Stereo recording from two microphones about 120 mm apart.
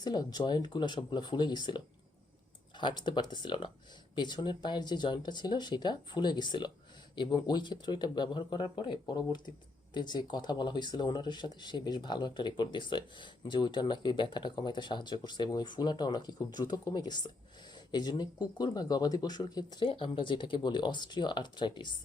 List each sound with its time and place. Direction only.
0.0 s speech: 35° left (ahead or behind)
19.9 s speech: 45° left (ahead or behind)